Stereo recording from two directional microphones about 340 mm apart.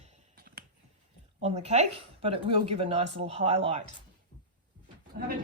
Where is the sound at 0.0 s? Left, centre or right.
Right.